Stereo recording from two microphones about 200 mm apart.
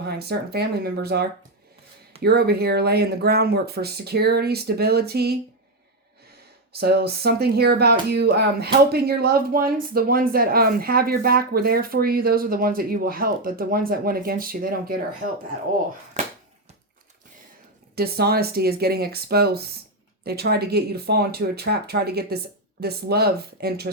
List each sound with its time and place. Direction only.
0.0 s speech: 55° right (ahead or behind)
6.7 s speech: 50° right (ahead or behind)
17.9 s speech: 50° right (ahead or behind)